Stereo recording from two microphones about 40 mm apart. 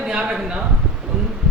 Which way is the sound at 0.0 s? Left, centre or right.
Right.